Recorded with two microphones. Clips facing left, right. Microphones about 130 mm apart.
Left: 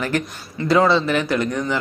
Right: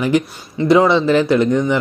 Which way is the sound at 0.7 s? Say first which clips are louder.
Right 4 dB; 20° right (ahead or behind).